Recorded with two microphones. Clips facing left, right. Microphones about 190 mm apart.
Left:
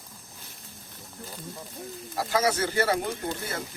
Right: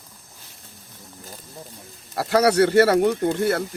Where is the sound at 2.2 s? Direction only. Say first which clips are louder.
Right 8 dB; 70° right (ahead or behind).